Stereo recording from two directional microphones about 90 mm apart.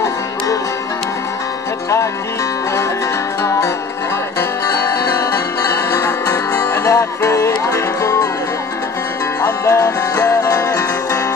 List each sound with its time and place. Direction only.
4.4 s music: 40° left (ahead or behind)
9.4 s music: 35° left (ahead or behind)